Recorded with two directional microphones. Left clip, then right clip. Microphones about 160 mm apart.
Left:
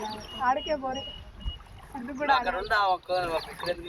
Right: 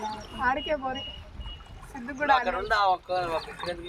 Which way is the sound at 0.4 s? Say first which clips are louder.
Even; 55° left (ahead or behind).